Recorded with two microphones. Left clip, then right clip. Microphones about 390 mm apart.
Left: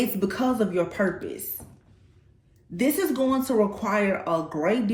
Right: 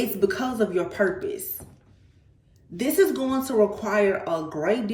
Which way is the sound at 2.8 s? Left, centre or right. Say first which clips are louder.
Right 2 dB; centre.